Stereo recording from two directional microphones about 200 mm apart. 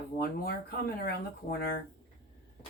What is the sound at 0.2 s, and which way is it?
Speech, 50° left (ahead or behind).